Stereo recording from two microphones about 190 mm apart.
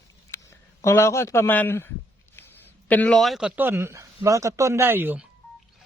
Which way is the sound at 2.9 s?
5° left (ahead or behind).